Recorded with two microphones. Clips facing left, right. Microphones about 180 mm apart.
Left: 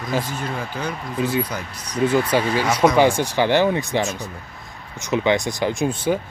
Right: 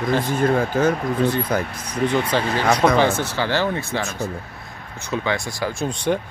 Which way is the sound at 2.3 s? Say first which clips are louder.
Even; 10° left (ahead or behind).